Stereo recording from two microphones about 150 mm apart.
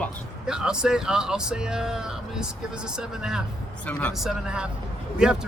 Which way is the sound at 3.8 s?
10° left (ahead or behind).